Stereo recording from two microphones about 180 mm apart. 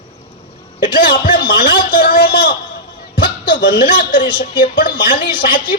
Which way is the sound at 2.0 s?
55° left (ahead or behind).